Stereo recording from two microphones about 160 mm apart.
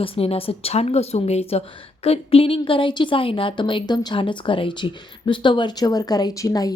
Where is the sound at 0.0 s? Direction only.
35° left (ahead or behind).